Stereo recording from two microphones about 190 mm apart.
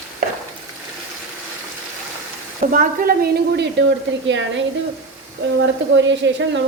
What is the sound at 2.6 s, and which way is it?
Speech, 45° right (ahead or behind).